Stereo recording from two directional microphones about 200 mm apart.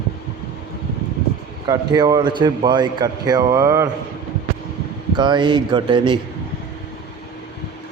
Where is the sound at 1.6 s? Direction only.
20° right (ahead or behind).